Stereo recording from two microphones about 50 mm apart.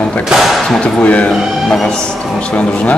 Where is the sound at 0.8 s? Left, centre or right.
Left.